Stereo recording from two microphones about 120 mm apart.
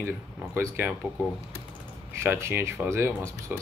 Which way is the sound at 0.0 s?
20° right (ahead or behind).